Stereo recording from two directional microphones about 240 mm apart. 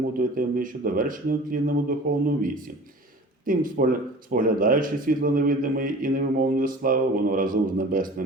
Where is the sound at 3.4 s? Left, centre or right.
Right.